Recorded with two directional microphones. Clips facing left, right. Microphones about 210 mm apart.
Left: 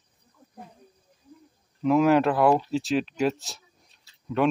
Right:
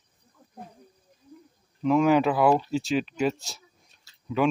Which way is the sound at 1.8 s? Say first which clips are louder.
Left 1 dB; centre (ahead or behind).